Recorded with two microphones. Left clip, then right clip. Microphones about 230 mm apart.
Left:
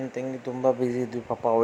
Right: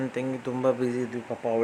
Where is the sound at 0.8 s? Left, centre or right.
Centre.